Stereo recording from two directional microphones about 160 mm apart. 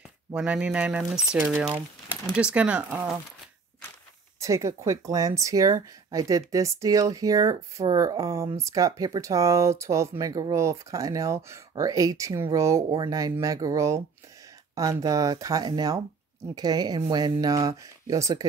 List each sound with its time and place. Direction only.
0.3 s speech: 5° right (ahead or behind)
4.4 s speech: 20° right (ahead or behind)